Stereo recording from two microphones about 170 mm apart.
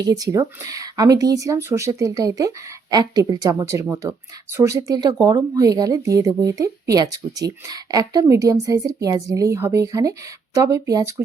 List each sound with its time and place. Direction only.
0.0 s speech: 20° right (ahead or behind)